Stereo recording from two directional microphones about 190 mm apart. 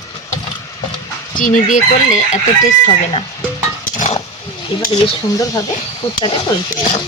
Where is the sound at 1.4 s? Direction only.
40° left (ahead or behind).